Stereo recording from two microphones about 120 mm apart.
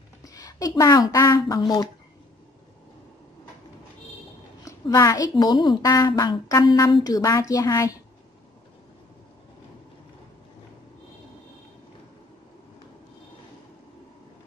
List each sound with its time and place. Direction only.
0.2 s speech: 30° left (ahead or behind)
4.6 s a woman's voice: 30° left (ahead or behind)